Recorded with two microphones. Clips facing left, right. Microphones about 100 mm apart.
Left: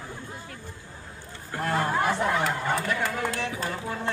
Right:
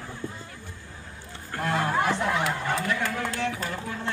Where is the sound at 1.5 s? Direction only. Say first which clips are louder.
Even; centre (ahead or behind).